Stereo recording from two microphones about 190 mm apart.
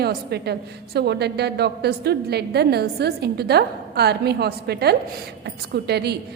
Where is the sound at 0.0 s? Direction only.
55° right (ahead or behind).